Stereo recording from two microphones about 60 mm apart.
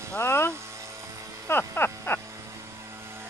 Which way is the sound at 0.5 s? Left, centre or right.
Right.